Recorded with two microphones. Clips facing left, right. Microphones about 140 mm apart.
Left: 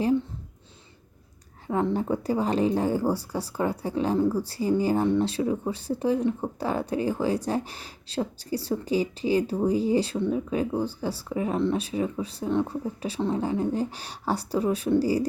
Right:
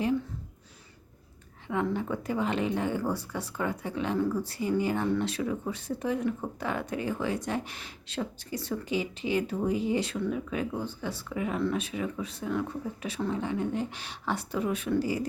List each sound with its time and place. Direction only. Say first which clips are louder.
1.6 s speech: left 4 dB; 35° left (ahead or behind)